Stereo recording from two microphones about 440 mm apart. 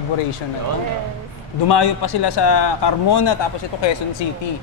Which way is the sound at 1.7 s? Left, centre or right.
Left.